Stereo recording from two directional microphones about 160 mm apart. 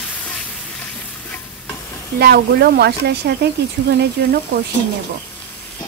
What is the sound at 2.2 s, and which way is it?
Speech, 80° right.